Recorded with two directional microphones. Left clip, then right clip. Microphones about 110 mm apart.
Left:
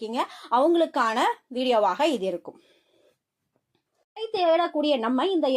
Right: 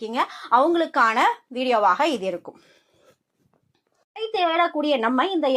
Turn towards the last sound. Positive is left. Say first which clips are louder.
# right 3 dB
turn(degrees=5)  # may be behind; listen again after turning